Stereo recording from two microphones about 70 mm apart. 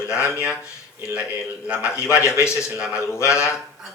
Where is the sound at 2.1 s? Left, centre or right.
Left.